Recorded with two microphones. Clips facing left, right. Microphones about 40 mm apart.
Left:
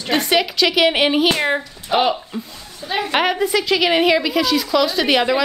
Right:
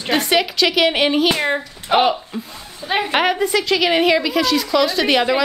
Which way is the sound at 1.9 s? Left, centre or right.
Right.